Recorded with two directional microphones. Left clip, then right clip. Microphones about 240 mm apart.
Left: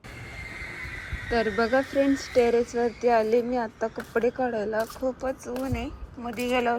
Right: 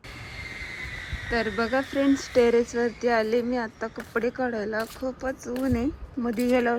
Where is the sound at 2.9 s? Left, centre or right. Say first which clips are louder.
Left 2 dB; centre.